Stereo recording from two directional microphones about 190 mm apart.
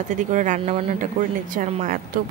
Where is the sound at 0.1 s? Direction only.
40° right (ahead or behind).